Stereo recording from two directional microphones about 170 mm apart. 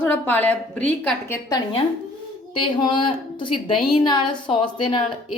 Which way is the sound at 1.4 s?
25° left (ahead or behind).